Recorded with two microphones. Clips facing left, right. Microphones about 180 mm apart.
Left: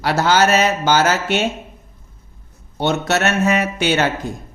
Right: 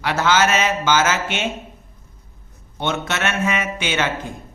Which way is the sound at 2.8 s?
40° left (ahead or behind).